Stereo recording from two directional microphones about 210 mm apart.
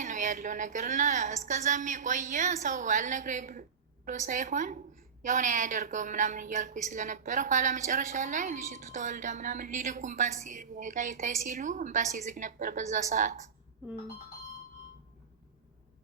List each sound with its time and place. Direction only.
0.0 s a woman's voice: 35° right (ahead or behind)